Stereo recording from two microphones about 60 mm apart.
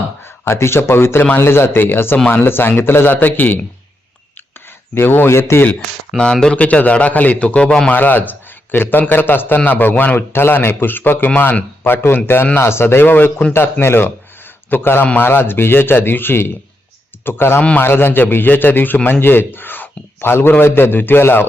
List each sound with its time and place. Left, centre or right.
0.2 s a man's voice: left
4.9 s a man's voice: left
6.1 s a man's voice: centre
7.9 s a man's voice: left
10.2 s a man's voice: left